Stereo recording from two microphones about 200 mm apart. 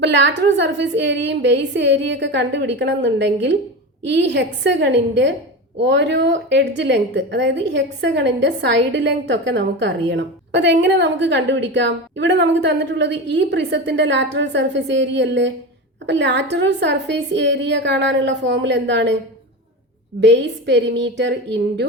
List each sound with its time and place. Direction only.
0.0 s a woman's voice: 60° right (ahead or behind)
20.2 s a woman's voice: 60° right (ahead or behind)